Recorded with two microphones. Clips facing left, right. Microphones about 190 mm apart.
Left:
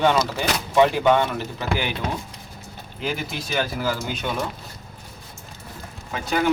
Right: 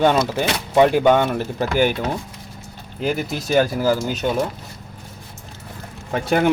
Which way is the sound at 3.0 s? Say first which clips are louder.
Right 6 dB; 45° right (ahead or behind).